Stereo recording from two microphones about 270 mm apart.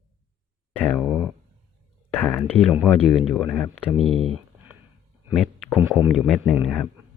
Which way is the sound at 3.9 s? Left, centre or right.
Right.